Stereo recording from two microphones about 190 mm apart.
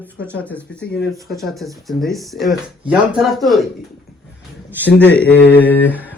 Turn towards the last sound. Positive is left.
turn(degrees=10)  # may be behind; listen again after turning